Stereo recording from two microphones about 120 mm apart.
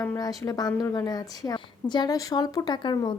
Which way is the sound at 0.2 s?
30° left (ahead or behind).